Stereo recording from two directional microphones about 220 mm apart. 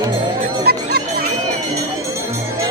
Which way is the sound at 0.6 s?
45° right (ahead or behind).